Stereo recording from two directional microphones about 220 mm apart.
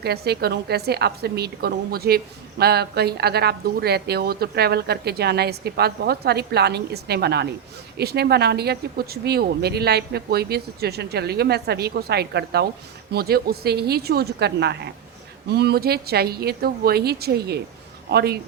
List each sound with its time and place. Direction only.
0.0 s a woman's voice: 45° right (ahead or behind)